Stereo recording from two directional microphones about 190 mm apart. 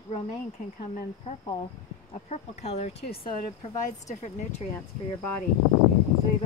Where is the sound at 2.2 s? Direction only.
35° left (ahead or behind).